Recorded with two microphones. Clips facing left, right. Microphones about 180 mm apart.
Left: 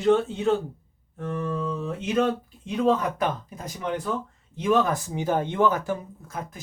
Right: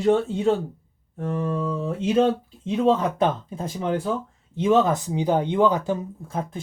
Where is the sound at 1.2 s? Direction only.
30° right (ahead or behind).